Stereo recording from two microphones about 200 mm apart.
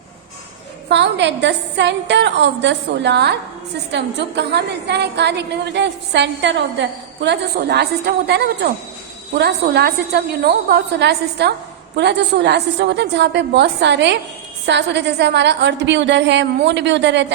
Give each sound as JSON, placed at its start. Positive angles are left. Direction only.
{"t": 0.9, "sound": "a woman's voice", "side_deg": -60}